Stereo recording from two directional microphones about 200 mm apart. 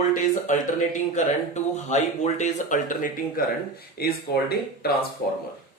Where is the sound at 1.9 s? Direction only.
35° left (ahead or behind).